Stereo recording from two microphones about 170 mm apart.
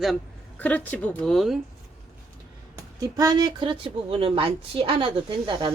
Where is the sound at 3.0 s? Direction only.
20° right (ahead or behind).